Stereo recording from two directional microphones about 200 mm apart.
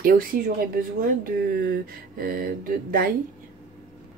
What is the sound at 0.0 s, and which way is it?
Speech, 45° right (ahead or behind).